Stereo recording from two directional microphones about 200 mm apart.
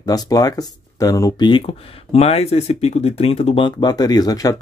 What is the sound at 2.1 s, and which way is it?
Speech, 30° left (ahead or behind).